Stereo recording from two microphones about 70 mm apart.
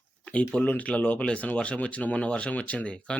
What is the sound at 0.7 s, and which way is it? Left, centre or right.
Speech, left.